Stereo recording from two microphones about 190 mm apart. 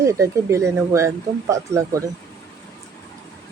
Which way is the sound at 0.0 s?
15° right (ahead or behind).